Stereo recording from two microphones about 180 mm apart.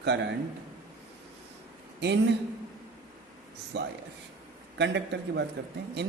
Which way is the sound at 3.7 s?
75° right (ahead or behind).